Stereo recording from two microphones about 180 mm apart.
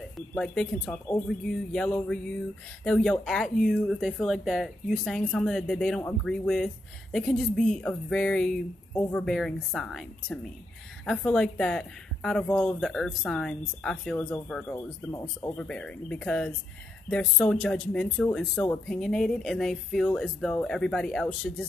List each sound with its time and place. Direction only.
0.4 s speech: 5° left (ahead or behind)
14.7 s speech: 15° left (ahead or behind)
15.5 s speech: 5° left (ahead or behind)